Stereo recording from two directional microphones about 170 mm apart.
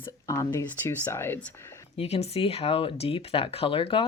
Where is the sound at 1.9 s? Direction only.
35° left (ahead or behind).